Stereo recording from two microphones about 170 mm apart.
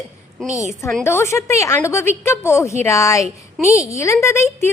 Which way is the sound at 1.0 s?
15° left (ahead or behind).